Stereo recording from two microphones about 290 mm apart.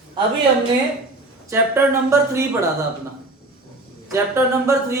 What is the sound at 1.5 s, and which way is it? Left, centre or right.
Speech, centre.